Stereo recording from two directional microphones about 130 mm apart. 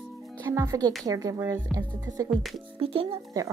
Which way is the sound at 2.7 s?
45° right (ahead or behind).